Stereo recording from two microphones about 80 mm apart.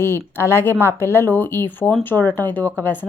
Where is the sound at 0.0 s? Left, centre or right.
Left.